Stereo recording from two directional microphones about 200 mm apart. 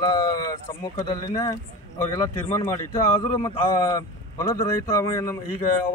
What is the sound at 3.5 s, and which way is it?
Speech, 25° left (ahead or behind).